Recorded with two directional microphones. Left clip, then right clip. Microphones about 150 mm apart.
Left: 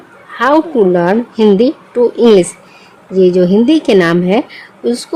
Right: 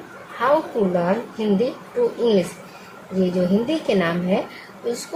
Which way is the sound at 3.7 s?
80° left.